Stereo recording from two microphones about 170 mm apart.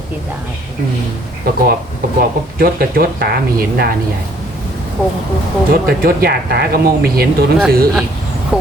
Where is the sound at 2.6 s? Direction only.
60° right (ahead or behind).